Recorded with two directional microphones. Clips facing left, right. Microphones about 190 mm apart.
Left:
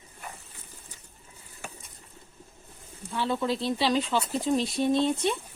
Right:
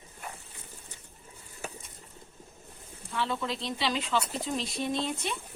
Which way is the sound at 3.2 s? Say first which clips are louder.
Left 4 dB; 30° left (ahead or behind).